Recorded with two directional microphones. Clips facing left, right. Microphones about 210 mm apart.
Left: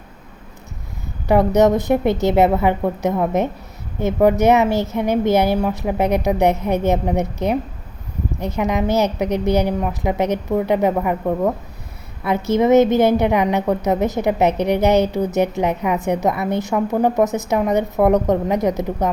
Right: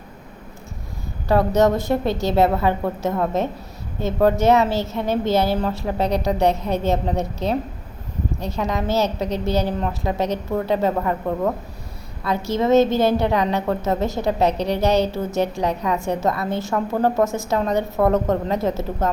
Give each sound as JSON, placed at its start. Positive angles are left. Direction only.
{"t": 1.3, "sound": "a woman's voice", "side_deg": 20}